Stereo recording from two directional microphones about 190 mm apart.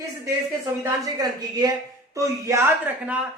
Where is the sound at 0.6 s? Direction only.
15° right (ahead or behind).